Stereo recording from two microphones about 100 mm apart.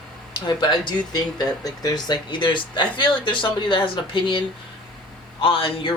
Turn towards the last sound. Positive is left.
turn(degrees=60)  # may be behind; listen again after turning